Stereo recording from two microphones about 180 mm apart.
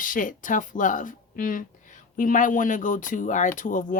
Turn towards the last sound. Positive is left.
turn(degrees=45)  # may be behind; listen again after turning